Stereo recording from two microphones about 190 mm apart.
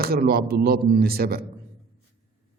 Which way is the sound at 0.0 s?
50° right (ahead or behind).